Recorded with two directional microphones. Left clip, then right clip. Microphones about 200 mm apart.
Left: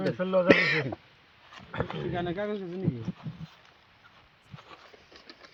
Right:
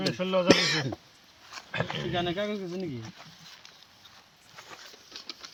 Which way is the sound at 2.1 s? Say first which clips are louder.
Right 2 dB; 35° right (ahead or behind).